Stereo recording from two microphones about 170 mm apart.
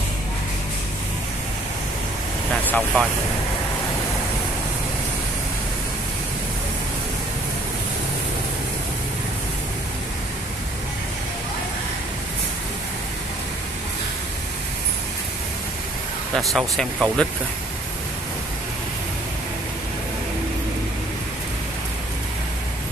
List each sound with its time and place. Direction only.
2.6 s speech: 5° left (ahead or behind)
16.3 s speech: centre (ahead or behind)